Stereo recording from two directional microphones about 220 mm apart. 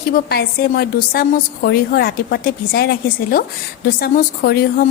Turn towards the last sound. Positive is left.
turn(degrees=40)  # may be behind; listen again after turning